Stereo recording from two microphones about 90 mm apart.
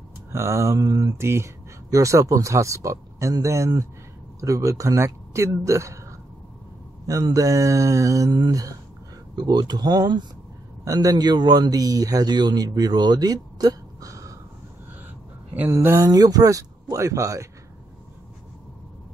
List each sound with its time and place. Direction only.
0.3 s speech: 30° right (ahead or behind)
7.3 s speech: 40° right (ahead or behind)
9.3 s a man's voice: 55° right (ahead or behind)
15.7 s speech: 30° right (ahead or behind)
16.1 s speech: 45° right (ahead or behind)